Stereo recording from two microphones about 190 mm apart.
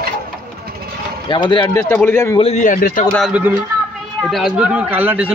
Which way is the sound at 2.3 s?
35° left (ahead or behind).